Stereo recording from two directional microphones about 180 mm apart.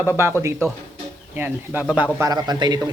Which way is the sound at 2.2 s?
20° right (ahead or behind).